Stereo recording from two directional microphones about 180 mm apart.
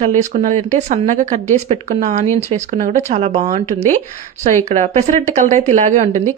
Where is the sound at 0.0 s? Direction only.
40° right (ahead or behind).